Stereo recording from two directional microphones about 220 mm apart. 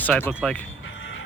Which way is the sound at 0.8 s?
60° left (ahead or behind).